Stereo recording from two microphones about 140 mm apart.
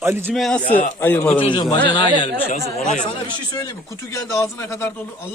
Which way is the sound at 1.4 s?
35° left (ahead or behind).